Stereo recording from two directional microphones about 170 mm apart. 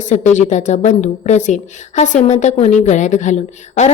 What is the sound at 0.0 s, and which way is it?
A woman's voice, 45° left (ahead or behind).